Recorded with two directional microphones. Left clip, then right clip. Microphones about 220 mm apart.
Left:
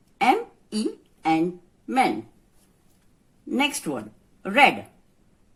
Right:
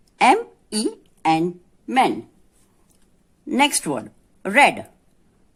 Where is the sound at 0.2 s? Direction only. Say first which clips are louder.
Right 5 dB; 45° right (ahead or behind).